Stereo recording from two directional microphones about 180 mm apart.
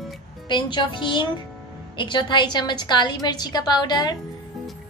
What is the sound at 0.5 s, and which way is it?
A woman's voice, 25° left (ahead or behind).